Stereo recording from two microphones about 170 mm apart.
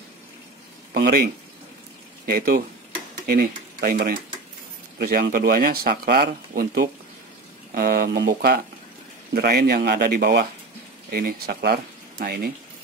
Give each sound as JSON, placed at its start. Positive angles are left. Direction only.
{"t": 0.9, "sound": "speech", "side_deg": -65}